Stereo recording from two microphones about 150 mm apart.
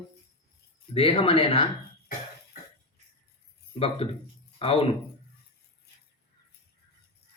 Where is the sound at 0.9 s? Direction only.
40° left (ahead or behind).